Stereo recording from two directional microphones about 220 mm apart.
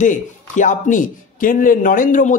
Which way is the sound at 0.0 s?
35° left (ahead or behind).